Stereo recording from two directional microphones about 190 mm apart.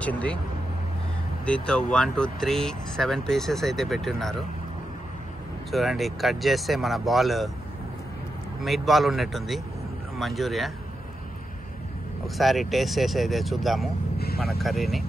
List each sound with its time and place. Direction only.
0.0 s speech: 5° left (ahead or behind)
1.4 s speech: 5° left (ahead or behind)
5.7 s speech: centre (ahead or behind)
8.6 s speech: centre (ahead or behind)
12.4 s speech: centre (ahead or behind)
14.1 s vehicle: 55° left (ahead or behind)
14.4 s speech: centre (ahead or behind)